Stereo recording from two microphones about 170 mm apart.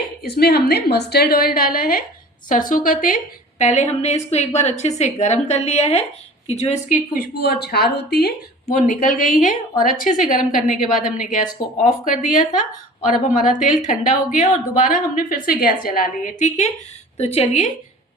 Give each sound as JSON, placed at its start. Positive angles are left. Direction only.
{"t": 0.2, "sound": "a woman's voice", "side_deg": 70}
{"t": 3.6, "sound": "a woman's voice", "side_deg": 45}
{"t": 8.7, "sound": "a woman's voice", "side_deg": 50}